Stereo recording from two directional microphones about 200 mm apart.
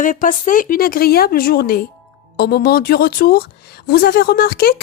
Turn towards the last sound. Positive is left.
turn(degrees=50)  # may be behind; listen again after turning